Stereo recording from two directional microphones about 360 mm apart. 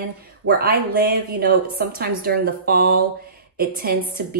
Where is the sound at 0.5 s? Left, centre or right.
Right.